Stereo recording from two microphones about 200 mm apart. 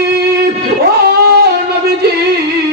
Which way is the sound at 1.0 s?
55° right (ahead or behind).